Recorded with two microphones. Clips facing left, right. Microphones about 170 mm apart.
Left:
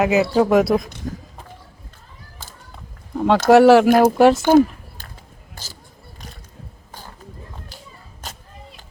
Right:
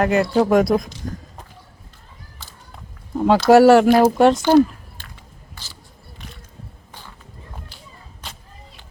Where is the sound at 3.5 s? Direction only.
Centre (ahead or behind).